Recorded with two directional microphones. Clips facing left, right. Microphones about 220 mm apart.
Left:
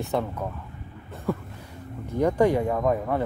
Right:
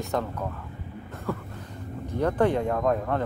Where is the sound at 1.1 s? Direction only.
15° left (ahead or behind).